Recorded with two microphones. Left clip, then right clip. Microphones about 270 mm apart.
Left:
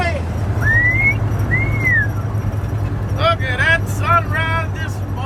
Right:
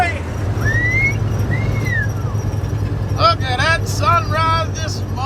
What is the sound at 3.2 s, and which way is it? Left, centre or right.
Vehicle, centre.